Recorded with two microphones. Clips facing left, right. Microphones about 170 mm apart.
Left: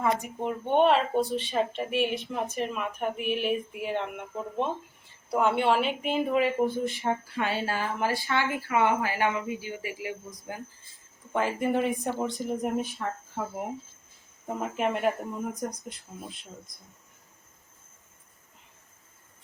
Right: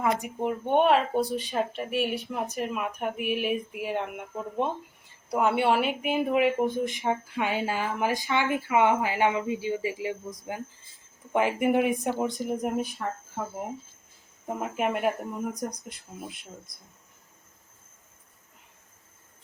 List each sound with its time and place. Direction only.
0.0 s speech: 5° right (ahead or behind)
14.4 s speech: 5° right (ahead or behind)